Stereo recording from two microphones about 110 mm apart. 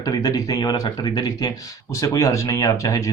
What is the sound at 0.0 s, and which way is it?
Speech, 35° left (ahead or behind).